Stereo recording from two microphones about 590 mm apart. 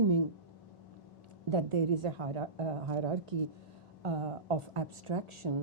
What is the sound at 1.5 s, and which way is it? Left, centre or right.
Speech, right.